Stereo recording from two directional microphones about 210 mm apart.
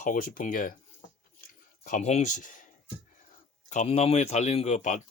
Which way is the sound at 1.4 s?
40° left (ahead or behind).